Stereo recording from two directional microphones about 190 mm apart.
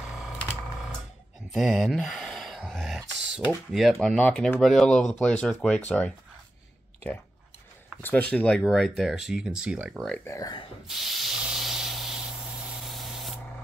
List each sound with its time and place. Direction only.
1.5 s speech: centre (ahead or behind)
8.0 s speech: 10° left (ahead or behind)
10.1 s speech: 15° left (ahead or behind)
10.9 s sanding: centre (ahead or behind)
12.8 s spray: centre (ahead or behind)